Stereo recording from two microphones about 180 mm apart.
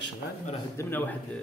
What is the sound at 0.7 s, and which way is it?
Speech, 10° left (ahead or behind).